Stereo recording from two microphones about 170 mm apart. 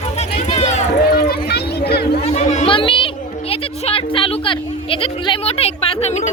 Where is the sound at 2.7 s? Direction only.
30° left (ahead or behind).